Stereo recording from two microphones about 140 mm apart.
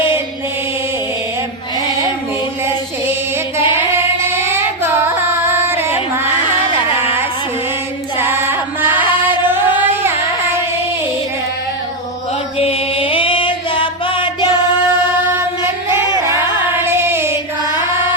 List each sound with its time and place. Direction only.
4.3 s female singing: 15° right (ahead or behind)
6.7 s music: 15° right (ahead or behind)
8.2 s chant: 15° right (ahead or behind)
9.0 s music: 15° right (ahead or behind)
9.5 s a sound: 15° right (ahead or behind)
12.5 s music: 40° left (ahead or behind)
15.6 s a sound: 20° right (ahead or behind)
16.2 s music: 20° right (ahead or behind)